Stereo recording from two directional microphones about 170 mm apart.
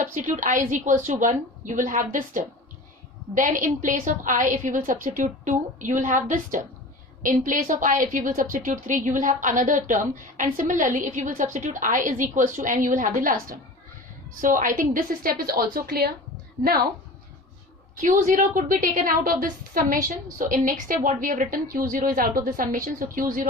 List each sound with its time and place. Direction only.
0.0 s a woman's voice: 50° right (ahead or behind); by 16.1 s 65° right (ahead or behind)
18.0 s a woman's voice: 50° right (ahead or behind)